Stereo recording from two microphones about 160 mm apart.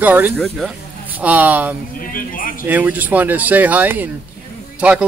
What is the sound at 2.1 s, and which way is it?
Speech, 60° left (ahead or behind).